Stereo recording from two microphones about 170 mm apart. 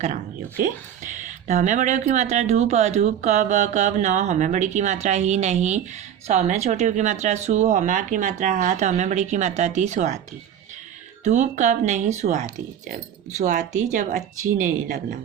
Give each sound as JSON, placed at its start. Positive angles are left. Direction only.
{"t": 1.1, "sound": "speech", "side_deg": -45}
{"t": 11.2, "sound": "speech", "side_deg": -45}